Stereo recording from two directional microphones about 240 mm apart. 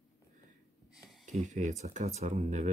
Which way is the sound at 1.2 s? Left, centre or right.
Right.